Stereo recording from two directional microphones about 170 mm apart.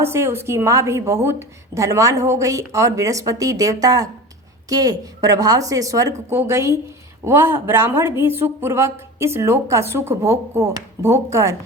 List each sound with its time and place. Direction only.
0.0 s a woman's voice: 15° right (ahead or behind)